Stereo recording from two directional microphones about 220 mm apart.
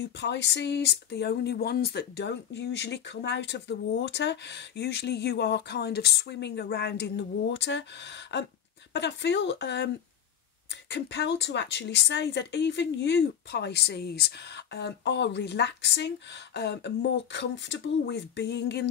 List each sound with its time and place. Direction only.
0.2 s speech: 50° left (ahead or behind)